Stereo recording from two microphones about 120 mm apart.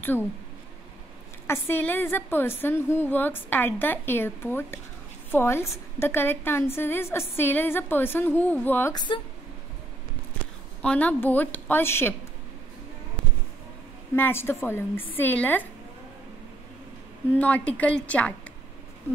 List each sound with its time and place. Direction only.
1.5 s a woman's voice: 20° left (ahead or behind)
8.9 s speech: 40° left (ahead or behind)
10.8 s a woman's voice: 10° left (ahead or behind)
14.1 s a woman's voice: 20° left (ahead or behind)
17.3 s a woman's voice: 10° left (ahead or behind)